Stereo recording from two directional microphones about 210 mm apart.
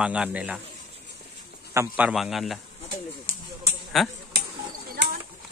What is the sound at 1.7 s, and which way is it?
Speech, 5° right (ahead or behind).